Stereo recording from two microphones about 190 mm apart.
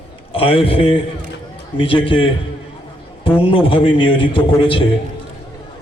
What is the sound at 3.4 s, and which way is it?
A man's voice, 25° left (ahead or behind).